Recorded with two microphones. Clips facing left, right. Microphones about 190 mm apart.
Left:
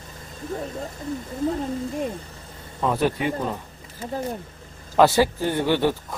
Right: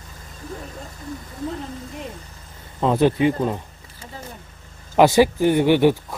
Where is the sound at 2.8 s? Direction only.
20° right (ahead or behind).